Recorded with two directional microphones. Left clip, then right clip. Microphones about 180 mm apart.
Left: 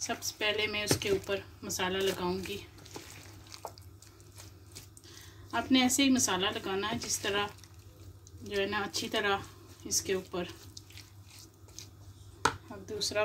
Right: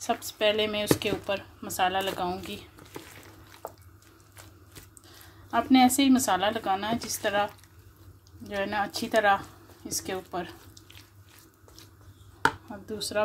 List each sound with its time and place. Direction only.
0.0 s speech: 55° right (ahead or behind)
5.5 s speech: 50° right (ahead or behind)
8.5 s speech: 50° right (ahead or behind)